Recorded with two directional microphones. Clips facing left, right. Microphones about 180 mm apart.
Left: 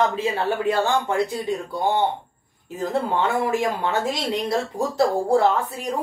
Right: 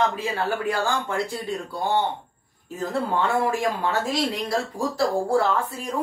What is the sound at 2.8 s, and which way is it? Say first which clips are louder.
Speech: left 2 dB; 20° left (ahead or behind).